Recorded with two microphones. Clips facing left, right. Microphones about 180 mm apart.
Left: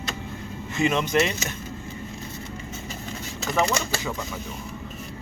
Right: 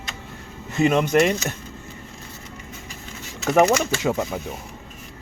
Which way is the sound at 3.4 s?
70° right (ahead or behind).